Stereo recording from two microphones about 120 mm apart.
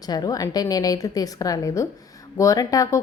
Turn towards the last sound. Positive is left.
turn(degrees=30)  # may be behind; listen again after turning